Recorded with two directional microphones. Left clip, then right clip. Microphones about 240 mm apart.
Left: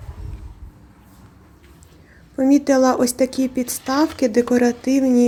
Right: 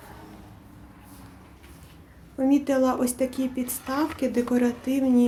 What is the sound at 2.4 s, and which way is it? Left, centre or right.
Speech, left.